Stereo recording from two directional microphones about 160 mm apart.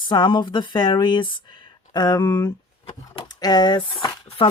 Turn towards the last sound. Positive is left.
turn(degrees=35)  # may be behind; listen again after turning